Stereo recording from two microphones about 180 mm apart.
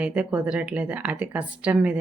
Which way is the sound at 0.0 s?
5° right (ahead or behind).